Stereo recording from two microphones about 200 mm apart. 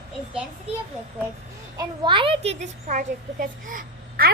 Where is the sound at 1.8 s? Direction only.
25° right (ahead or behind); by 4.3 s 40° right (ahead or behind).